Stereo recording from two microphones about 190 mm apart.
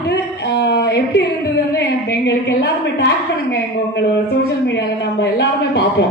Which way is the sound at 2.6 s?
60° left (ahead or behind).